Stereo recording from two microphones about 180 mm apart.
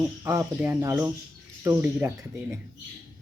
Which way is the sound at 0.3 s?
10° right (ahead or behind).